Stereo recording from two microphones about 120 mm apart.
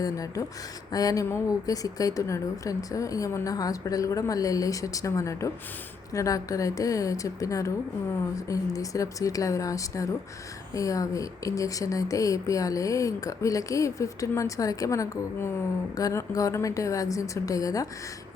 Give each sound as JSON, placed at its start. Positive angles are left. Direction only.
{"t": 0.0, "sound": "speech", "side_deg": 30}